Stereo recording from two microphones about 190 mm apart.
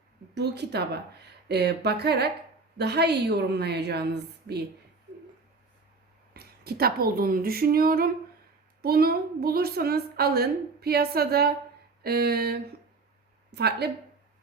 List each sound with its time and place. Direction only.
0.3 s a woman's voice: 60° right (ahead or behind)
6.3 s a woman's voice: 55° right (ahead or behind)